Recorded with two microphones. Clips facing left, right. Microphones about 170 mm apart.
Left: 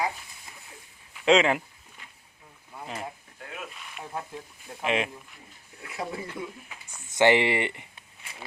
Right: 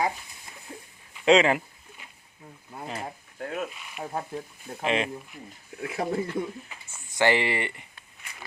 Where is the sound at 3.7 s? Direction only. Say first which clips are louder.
Right 4 dB; 5° right (ahead or behind).